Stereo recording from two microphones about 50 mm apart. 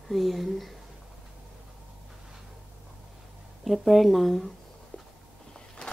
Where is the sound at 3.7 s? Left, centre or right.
Centre.